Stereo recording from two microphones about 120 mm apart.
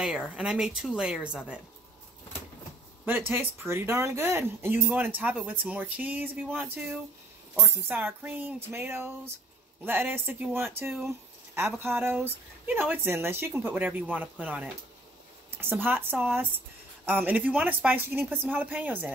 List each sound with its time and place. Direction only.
0.3 s speech: 5° right (ahead or behind)
3.1 s speech: 15° right (ahead or behind)
11.1 s a sound: 20° right (ahead or behind)
11.8 s speech: 20° right (ahead or behind)